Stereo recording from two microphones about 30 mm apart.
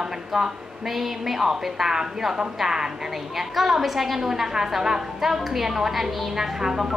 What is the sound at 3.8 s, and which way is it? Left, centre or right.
A woman's voice, centre.